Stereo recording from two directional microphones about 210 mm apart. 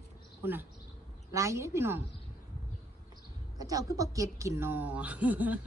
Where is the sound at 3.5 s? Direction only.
15° right (ahead or behind).